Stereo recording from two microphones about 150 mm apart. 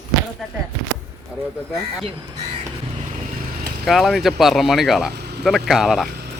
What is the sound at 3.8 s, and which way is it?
Speech, centre (ahead or behind).